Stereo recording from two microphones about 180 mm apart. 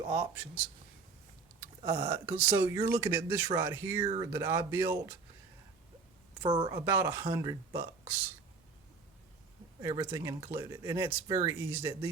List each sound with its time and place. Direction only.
0.1 s speech: 10° right (ahead or behind)
1.8 s speech: 30° right (ahead or behind)
2.2 s speech: 15° right (ahead or behind)
4.0 s speech: 30° right (ahead or behind)
4.3 s speech: 15° right (ahead or behind)
6.4 s a woman's voice: 30° right (ahead or behind)
6.8 s speech: 15° right (ahead or behind)
9.8 s speech: 25° right (ahead or behind)
10.1 s speech: 15° right (ahead or behind)